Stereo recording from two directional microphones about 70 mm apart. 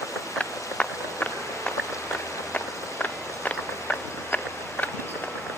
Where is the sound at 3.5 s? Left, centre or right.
Left.